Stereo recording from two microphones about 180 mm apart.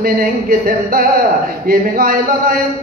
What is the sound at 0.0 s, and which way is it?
A man's voice, 55° right (ahead or behind).